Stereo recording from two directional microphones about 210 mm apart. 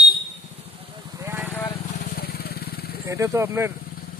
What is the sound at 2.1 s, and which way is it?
Vehicle, 50° left (ahead or behind).